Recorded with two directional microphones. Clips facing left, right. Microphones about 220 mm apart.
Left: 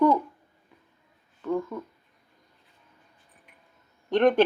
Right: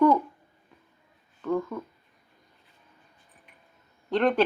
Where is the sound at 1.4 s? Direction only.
10° left (ahead or behind).